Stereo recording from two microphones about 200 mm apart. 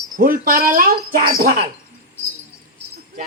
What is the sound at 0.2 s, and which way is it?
Speech, 45° right (ahead or behind).